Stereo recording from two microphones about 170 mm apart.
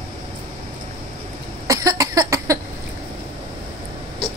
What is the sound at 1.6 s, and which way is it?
Cough, 20° right (ahead or behind).